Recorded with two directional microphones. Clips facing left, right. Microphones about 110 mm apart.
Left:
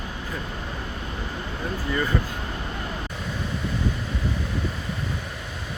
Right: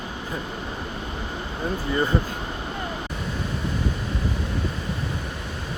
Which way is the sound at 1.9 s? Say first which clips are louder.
Right 2 dB; 25° right (ahead or behind).